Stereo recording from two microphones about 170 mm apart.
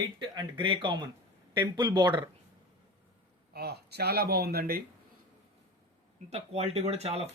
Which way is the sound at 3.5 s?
70° right (ahead or behind).